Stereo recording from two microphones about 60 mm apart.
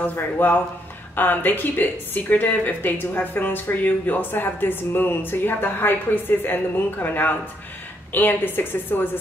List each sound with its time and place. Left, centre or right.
0.0 s a woman's voice: left